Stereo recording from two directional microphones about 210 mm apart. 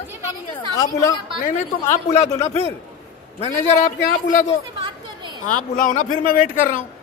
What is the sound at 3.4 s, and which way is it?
Speech, 40° left (ahead or behind).